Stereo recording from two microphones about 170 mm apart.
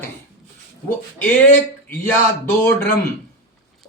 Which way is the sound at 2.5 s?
10° left (ahead or behind).